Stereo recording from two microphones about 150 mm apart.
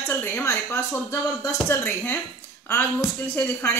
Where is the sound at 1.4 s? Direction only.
15° left (ahead or behind).